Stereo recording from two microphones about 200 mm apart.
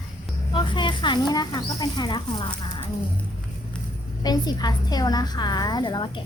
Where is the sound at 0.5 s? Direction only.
25° left (ahead or behind).